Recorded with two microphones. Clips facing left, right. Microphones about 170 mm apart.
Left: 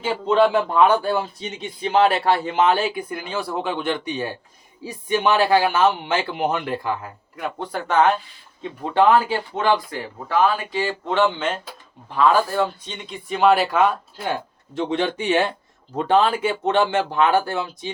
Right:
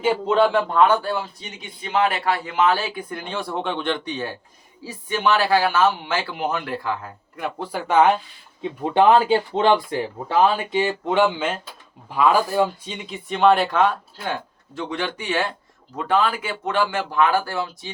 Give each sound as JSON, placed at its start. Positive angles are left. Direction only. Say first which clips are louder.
{"t": 0.3, "sound": "speech", "louder": "left 3 dB", "side_deg": 0}
{"t": 0.7, "sound": "speech", "louder": "left 1 dB", "side_deg": 15}
{"t": 1.8, "sound": "speech", "louder": "left 4 dB", "side_deg": 30}
{"t": 7.3, "sound": "speech", "louder": "even", "side_deg": -5}
{"t": 8.8, "sound": "speech", "louder": "right 1 dB", "side_deg": -20}
{"t": 14.8, "sound": "speech", "louder": "left 5 dB", "side_deg": 25}